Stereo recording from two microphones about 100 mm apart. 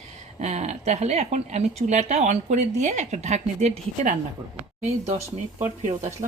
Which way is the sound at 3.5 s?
90° right.